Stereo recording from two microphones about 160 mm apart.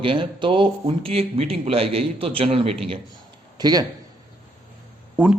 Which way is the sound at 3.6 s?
25° right (ahead or behind).